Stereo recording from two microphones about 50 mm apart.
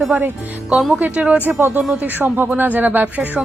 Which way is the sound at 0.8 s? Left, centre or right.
Centre.